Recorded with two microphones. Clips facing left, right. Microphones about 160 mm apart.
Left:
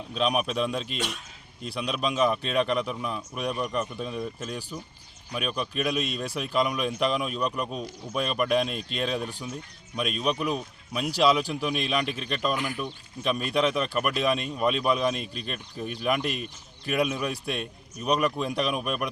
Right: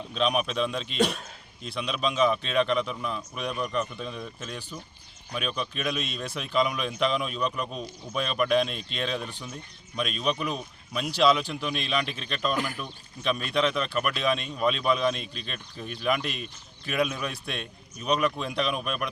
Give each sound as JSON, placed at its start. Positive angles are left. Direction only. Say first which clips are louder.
{"t": 0.1, "sound": "a man's voice", "louder": "even", "side_deg": 5}
{"t": 0.9, "sound": "a man's voice", "louder": "right 7 dB", "side_deg": -40}
{"t": 1.6, "sound": "a man's voice", "louder": "even", "side_deg": 5}